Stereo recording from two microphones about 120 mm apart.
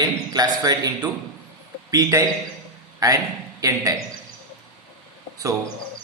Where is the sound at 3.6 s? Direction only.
30° right (ahead or behind).